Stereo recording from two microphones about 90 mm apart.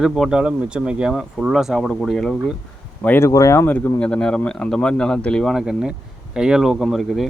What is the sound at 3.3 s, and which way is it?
Speech, 35° left (ahead or behind).